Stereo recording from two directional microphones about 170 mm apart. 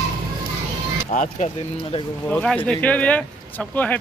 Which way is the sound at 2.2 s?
5° left (ahead or behind).